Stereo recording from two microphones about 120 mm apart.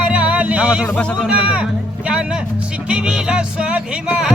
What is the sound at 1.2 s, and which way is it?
Speech, 10° right (ahead or behind).